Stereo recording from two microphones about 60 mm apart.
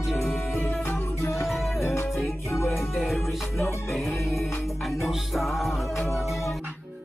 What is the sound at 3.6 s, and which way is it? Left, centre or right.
Music, left.